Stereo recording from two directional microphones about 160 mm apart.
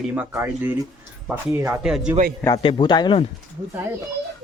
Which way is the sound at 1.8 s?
5° right (ahead or behind).